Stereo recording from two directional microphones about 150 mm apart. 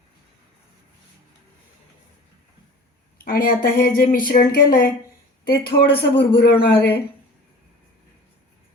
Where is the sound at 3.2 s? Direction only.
75° left (ahead or behind).